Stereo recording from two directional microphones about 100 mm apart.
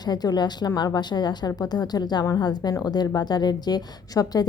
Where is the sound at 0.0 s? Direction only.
45° left (ahead or behind).